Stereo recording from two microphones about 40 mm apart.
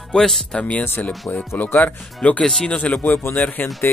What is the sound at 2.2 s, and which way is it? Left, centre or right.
Speech, left.